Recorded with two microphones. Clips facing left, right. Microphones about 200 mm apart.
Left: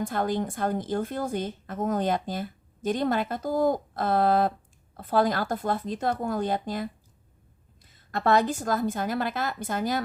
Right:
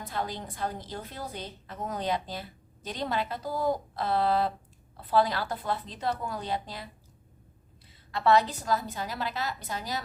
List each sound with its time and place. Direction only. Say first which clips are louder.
0.0 s speech: left 8 dB; 50° left (ahead or behind)
7.9 s speech: even; 50° left (ahead or behind)